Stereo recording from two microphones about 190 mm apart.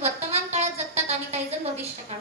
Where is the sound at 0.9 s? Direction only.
35° right (ahead or behind).